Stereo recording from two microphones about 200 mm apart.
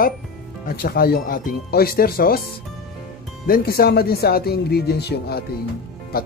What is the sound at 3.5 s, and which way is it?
Speech, 50° left (ahead or behind).